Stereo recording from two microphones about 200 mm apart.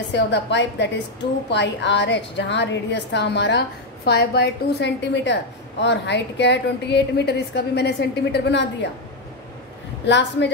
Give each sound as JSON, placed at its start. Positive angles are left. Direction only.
{"t": 0.1, "sound": "a woman's voice", "side_deg": 60}
{"t": 10.0, "sound": "a woman's voice", "side_deg": 60}